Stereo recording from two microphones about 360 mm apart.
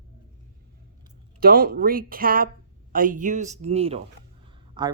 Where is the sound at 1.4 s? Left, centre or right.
Right.